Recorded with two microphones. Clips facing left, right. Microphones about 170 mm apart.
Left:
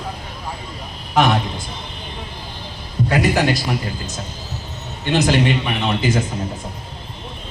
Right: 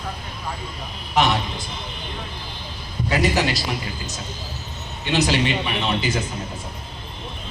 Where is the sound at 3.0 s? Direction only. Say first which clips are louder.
Left 3 dB; 55° left (ahead or behind).